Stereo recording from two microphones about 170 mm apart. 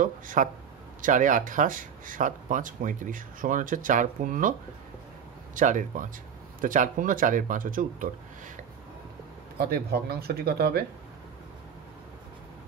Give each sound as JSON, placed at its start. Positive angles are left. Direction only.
{"t": 0.0, "sound": "speech", "side_deg": -50}
{"t": 9.6, "sound": "speech", "side_deg": -70}